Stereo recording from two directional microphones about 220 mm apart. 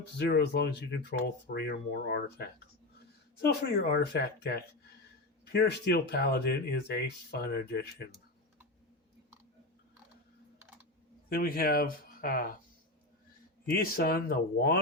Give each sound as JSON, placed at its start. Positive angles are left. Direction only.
{"t": 0.0, "sound": "speech", "side_deg": 45}
{"t": 11.3, "sound": "speech", "side_deg": 40}
{"t": 13.7, "sound": "speech", "side_deg": 45}